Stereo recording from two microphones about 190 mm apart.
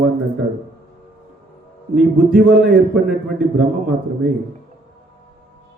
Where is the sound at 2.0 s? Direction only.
5° right (ahead or behind).